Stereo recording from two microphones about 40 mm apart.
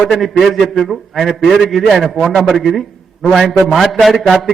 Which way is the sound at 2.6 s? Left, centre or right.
Centre.